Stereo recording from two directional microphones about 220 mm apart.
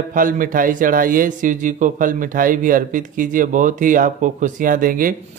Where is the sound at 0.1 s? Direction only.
40° right (ahead or behind).